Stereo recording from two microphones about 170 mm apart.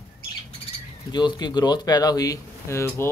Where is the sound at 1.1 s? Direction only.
25° left (ahead or behind).